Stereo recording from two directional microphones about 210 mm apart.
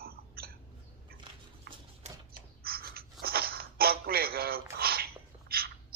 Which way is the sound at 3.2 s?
45° right (ahead or behind).